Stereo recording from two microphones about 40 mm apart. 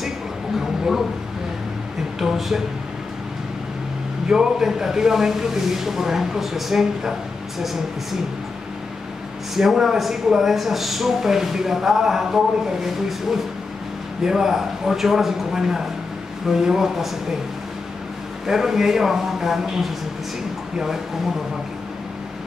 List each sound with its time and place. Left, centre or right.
2.1 s speech: centre
4.3 s speech: centre
9.6 s speech: centre
14.2 s speech: centre
18.5 s speech: centre